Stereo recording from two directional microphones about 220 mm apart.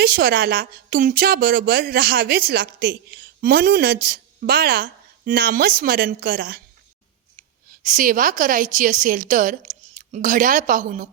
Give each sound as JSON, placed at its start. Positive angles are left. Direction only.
{"t": 0.0, "sound": "a woman's voice", "side_deg": -40}